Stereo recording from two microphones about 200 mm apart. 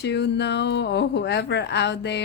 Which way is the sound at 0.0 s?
60° left (ahead or behind).